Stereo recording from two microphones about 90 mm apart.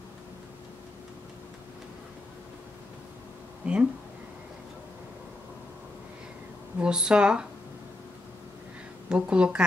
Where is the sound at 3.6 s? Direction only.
15° right (ahead or behind).